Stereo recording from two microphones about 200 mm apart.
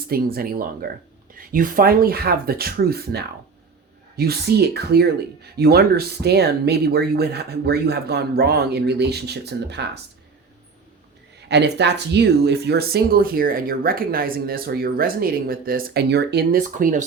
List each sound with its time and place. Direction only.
0.1 s speech: 50° right (ahead or behind)
11.4 s speech: 60° right (ahead or behind); by 17.1 s 40° right (ahead or behind)